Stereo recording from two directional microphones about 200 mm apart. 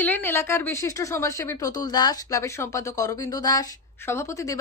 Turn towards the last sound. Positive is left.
turn(degrees=15)  # may be behind; listen again after turning